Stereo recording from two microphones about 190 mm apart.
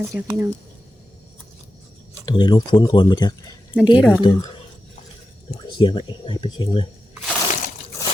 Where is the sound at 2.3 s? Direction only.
25° left (ahead or behind).